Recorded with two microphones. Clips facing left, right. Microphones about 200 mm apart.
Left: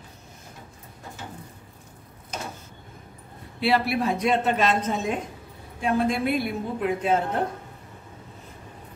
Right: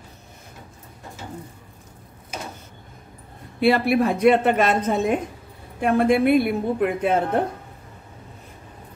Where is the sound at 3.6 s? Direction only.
55° right (ahead or behind).